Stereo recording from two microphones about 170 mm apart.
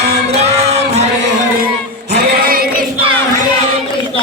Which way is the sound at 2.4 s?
55° right (ahead or behind).